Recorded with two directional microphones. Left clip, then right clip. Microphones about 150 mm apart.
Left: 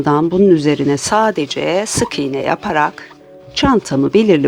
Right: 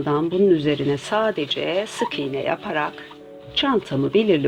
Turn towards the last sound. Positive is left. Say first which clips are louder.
# left 6 dB
turn(degrees=50)  # may be behind; listen again after turning